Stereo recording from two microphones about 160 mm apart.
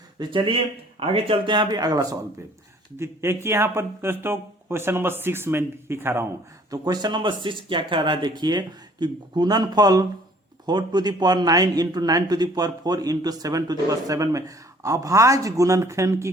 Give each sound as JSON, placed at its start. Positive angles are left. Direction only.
{"t": 0.2, "sound": "a man's voice", "side_deg": -30}